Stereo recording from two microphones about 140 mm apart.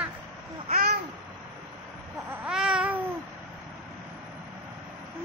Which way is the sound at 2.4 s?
5° right (ahead or behind).